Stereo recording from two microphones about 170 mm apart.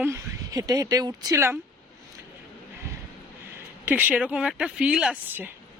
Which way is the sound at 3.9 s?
10° right (ahead or behind).